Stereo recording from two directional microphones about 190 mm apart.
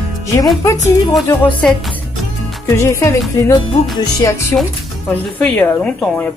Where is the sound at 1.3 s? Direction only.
5° left (ahead or behind).